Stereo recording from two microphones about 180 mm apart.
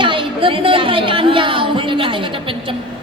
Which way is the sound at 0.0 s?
30° right (ahead or behind).